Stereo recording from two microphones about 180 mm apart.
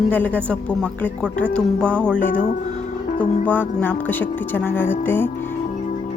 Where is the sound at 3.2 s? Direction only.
10° left (ahead or behind).